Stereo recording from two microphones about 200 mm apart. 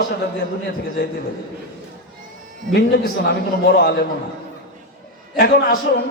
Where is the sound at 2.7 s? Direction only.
55° left (ahead or behind).